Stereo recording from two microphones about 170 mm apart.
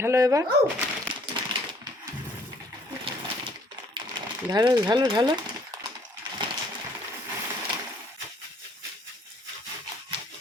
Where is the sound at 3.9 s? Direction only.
30° right (ahead or behind).